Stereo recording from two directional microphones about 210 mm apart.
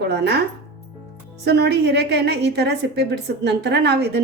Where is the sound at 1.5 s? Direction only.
50° right (ahead or behind).